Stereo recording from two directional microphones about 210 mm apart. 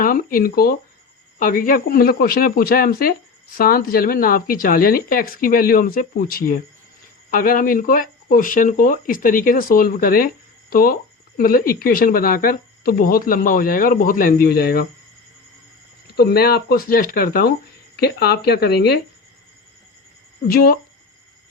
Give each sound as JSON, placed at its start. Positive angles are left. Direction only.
{"t": 0.0, "sound": "a woman's voice", "side_deg": 45}
{"t": 16.0, "sound": "a woman's voice", "side_deg": 50}
{"t": 20.5, "sound": "a woman's voice", "side_deg": 45}